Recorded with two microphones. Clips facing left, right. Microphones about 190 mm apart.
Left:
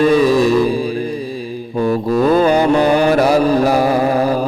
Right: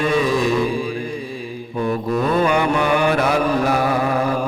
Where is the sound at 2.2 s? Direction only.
30° left (ahead or behind).